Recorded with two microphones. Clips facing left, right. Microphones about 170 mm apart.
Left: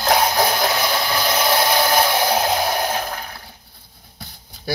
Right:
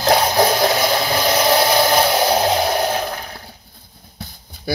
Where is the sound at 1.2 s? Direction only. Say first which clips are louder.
Right 3 dB; 35° right (ahead or behind).